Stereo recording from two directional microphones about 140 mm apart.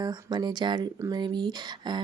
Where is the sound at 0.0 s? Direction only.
30° right (ahead or behind).